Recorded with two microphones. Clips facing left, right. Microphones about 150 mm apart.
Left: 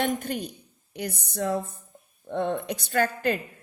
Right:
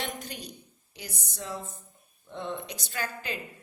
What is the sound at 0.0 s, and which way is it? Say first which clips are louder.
A woman's voice: left 10 dB; 55° left (ahead or behind).